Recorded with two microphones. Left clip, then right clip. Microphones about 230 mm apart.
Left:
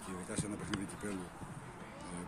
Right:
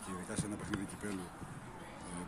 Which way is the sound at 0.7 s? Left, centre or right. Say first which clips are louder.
Even; left.